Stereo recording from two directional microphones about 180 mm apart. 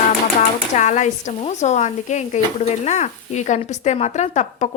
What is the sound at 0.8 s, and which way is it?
Speech, 40° left (ahead or behind).